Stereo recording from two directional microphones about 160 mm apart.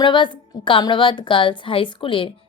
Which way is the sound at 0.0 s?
30° left (ahead or behind).